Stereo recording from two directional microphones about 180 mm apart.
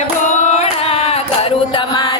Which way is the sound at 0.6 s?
35° left (ahead or behind).